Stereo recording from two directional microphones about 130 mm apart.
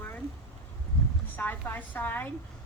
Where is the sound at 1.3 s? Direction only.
15° left (ahead or behind).